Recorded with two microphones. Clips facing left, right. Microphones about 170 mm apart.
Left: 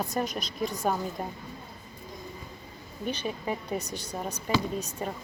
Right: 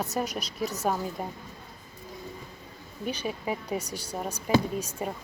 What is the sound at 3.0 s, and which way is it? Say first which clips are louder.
Speech: even; 10° right (ahead or behind).